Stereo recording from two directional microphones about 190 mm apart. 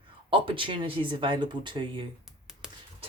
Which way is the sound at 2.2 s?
5° right (ahead or behind).